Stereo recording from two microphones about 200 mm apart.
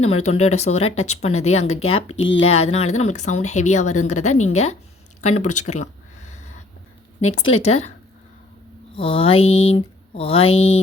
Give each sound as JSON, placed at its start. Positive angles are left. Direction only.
{"t": 0.3, "sound": "speech", "side_deg": 35}
{"t": 9.0, "sound": "speech", "side_deg": 30}